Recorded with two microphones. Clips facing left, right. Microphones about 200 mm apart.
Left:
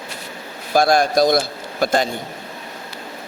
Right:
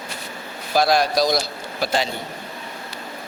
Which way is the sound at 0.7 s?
50° left (ahead or behind).